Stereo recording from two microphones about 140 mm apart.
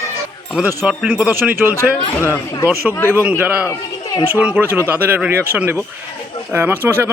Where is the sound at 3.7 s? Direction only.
25° left (ahead or behind).